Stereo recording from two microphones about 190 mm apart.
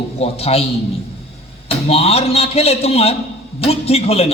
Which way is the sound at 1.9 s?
30° left (ahead or behind).